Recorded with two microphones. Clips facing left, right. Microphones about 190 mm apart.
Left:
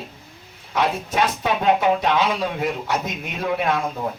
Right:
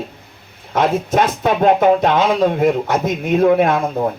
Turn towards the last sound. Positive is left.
turn(degrees=-55)  # may be behind; listen again after turning